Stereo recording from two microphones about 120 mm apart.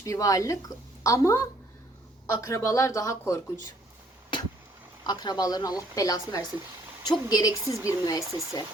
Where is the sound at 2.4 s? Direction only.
25° left (ahead or behind).